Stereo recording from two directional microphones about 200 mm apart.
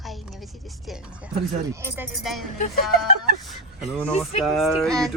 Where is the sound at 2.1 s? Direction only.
Centre (ahead or behind).